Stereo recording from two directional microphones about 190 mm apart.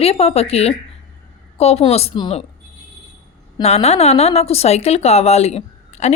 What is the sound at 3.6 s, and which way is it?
A woman's voice, 35° left (ahead or behind).